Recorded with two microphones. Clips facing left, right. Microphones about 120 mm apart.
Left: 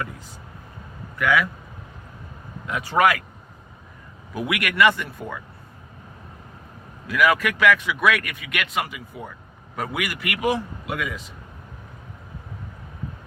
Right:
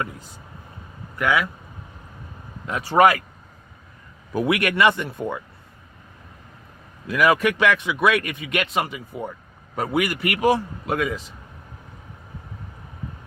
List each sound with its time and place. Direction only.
1.2 s speech: 25° right (ahead or behind)
2.6 s a man's voice: 35° right (ahead or behind)
4.4 s speech: 30° right (ahead or behind)
7.1 s a man's voice: 25° right (ahead or behind)